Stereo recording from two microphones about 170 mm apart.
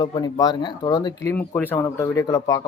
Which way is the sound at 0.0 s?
25° left (ahead or behind).